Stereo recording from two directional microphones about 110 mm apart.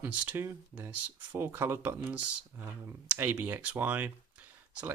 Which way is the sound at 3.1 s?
20° right (ahead or behind).